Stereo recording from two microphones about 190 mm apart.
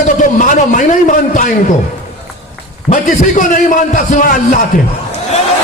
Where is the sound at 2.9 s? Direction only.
45° left (ahead or behind).